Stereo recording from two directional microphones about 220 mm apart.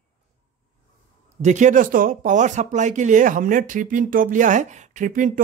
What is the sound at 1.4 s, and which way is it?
Speech, 35° right (ahead or behind).